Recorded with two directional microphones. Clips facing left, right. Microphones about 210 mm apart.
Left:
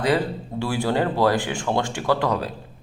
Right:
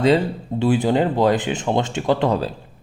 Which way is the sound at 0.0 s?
25° right (ahead or behind).